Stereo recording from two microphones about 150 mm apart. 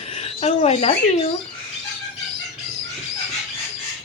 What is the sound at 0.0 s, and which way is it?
Speech, 45° left (ahead or behind).